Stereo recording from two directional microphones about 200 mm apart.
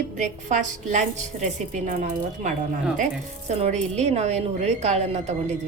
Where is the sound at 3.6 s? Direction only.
35° right (ahead or behind).